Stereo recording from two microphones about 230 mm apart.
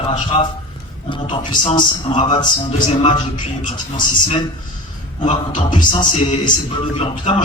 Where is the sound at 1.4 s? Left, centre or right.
Centre.